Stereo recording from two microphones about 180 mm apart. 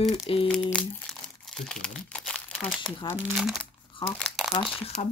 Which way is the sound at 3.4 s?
Centre (ahead or behind).